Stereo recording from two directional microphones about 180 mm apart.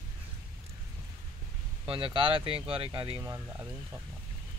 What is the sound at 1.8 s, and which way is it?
Speech, 30° right (ahead or behind).